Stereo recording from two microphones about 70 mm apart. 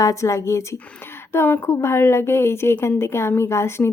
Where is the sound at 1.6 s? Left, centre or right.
Left.